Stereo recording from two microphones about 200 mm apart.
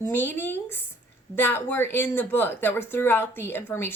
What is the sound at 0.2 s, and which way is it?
Speech, 10° left (ahead or behind).